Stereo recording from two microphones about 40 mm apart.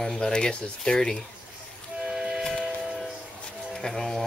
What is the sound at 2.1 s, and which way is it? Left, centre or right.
Music, centre.